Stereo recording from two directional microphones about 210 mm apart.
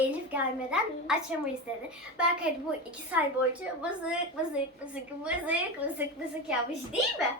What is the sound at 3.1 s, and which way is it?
A woman's voice, 5° right (ahead or behind).